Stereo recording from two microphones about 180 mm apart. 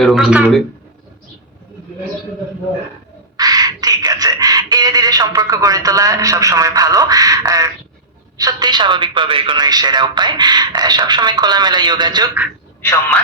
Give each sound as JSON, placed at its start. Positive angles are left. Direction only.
{"t": 0.0, "sound": "speech", "side_deg": 0}
{"t": 3.3, "sound": "a sound", "side_deg": -20}
{"t": 8.4, "sound": "a woman's voice", "side_deg": -20}